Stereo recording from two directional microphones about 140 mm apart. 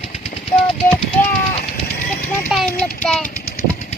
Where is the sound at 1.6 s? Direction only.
90° left.